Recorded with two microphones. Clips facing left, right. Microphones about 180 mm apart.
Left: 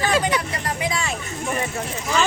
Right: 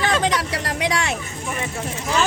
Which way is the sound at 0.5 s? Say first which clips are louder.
Right 2 dB; 80° right.